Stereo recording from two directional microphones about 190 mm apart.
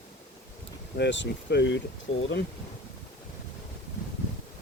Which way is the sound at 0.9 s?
65° left (ahead or behind).